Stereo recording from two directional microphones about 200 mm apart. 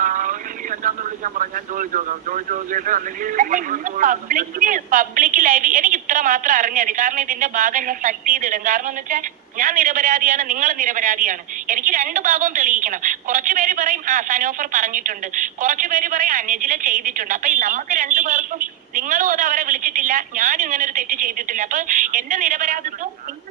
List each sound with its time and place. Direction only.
0.0 s speech: 40° right (ahead or behind)